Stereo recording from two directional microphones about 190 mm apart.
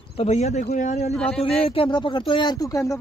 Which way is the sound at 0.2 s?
35° left (ahead or behind).